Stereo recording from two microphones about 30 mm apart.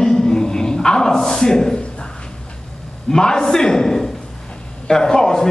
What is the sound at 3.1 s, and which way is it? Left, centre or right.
A man's voice, left.